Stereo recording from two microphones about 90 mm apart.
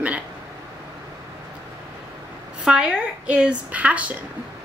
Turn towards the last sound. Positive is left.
turn(degrees=-15)  # may be behind; listen again after turning